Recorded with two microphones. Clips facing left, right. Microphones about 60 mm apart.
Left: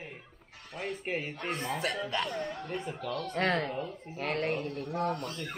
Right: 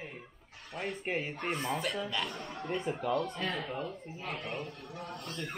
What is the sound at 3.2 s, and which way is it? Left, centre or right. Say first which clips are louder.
Speech: left 5 dB; left.